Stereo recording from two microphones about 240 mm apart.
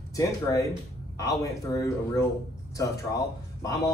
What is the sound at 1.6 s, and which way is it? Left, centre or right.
A man's voice, centre.